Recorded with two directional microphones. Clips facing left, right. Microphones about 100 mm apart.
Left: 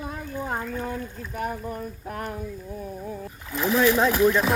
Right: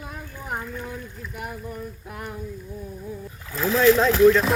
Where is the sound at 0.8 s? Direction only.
45° left (ahead or behind).